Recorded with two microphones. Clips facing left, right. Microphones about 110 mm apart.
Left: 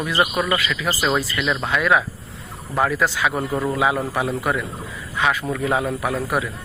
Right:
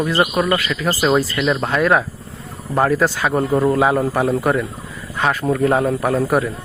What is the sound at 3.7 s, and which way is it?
Speech, 40° right (ahead or behind).